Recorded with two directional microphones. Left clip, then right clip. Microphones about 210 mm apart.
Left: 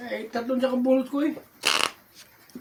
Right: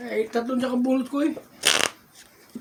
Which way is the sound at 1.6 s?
10° right (ahead or behind).